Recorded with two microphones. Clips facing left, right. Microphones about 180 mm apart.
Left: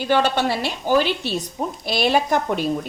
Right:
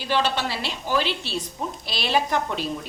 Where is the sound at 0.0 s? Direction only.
50° left (ahead or behind).